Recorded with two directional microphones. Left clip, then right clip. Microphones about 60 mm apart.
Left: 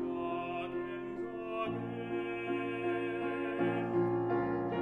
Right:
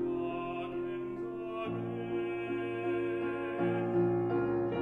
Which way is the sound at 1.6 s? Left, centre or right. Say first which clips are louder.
Right 1 dB; left.